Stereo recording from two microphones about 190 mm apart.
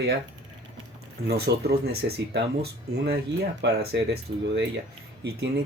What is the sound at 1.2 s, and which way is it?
Speech, 60° right (ahead or behind).